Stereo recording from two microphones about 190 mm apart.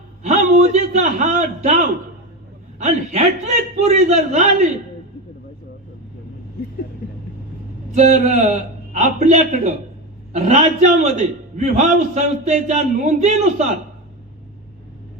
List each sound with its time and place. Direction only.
0.2 s a man's voice: 40° right (ahead or behind)
7.9 s a man's voice: 40° right (ahead or behind)